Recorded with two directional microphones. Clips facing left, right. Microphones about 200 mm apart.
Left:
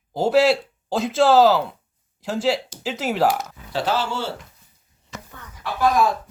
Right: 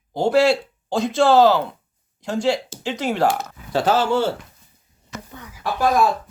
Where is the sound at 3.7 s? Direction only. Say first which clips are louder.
Right 5 dB; 50° right (ahead or behind).